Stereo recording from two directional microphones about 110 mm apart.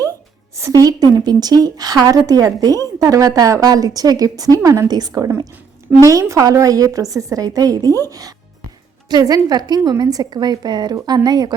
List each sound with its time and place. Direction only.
0.5 s a woman's voice: 30° right (ahead or behind)
9.0 s a woman's voice: 35° right (ahead or behind)